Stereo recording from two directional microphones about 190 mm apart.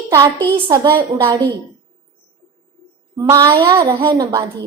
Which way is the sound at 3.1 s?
20° right (ahead or behind).